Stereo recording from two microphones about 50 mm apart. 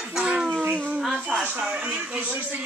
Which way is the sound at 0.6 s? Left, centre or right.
Right.